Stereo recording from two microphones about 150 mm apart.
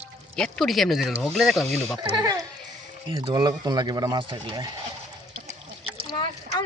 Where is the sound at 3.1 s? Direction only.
30° right (ahead or behind).